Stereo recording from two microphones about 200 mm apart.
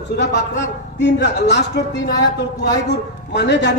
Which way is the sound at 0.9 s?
60° left (ahead or behind).